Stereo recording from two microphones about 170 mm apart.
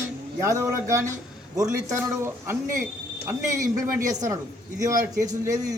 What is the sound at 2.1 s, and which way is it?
Speech, 15° right (ahead or behind).